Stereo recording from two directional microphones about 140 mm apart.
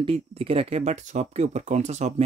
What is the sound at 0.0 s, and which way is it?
Speech, 45° right (ahead or behind).